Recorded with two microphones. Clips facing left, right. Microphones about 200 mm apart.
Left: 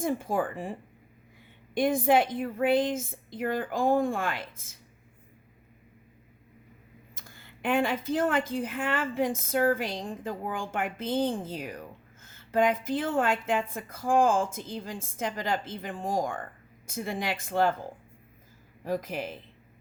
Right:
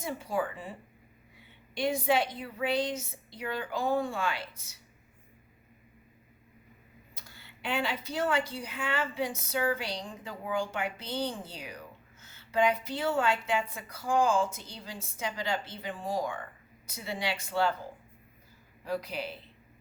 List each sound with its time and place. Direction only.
0.0 s a woman's voice: 50° left (ahead or behind)
7.2 s a woman's voice: 50° left (ahead or behind)
18.9 s a woman's voice: 45° left (ahead or behind)